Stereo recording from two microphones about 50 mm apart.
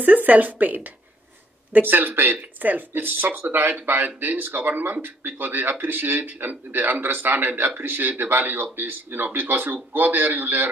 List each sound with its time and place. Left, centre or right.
0.0 s speech: right